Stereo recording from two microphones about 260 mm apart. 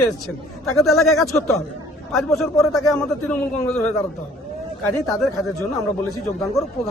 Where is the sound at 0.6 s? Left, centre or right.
Centre.